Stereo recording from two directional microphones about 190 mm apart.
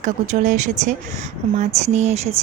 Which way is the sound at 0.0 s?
40° right (ahead or behind).